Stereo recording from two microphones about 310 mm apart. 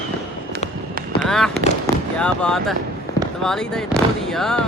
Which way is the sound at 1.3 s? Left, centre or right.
Centre.